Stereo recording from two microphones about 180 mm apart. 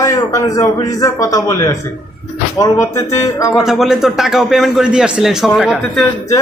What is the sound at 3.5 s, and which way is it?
A man's voice, centre (ahead or behind).